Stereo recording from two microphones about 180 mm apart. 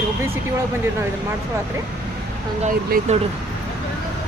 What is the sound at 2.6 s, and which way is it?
Speech, 45° right (ahead or behind).